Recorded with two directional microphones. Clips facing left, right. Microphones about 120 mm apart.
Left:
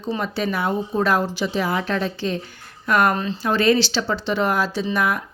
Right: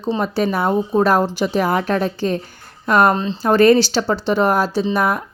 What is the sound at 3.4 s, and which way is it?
A woman's voice, 45° right (ahead or behind).